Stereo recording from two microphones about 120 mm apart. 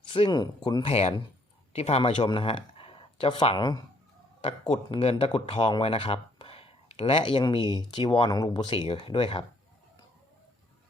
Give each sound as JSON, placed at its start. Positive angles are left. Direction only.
{"t": 0.1, "sound": "speech", "side_deg": 40}
{"t": 0.9, "sound": "speech", "side_deg": 55}
{"t": 4.7, "sound": "speech", "side_deg": 55}
{"t": 8.3, "sound": "speech", "side_deg": 30}
{"t": 8.5, "sound": "speech", "side_deg": 45}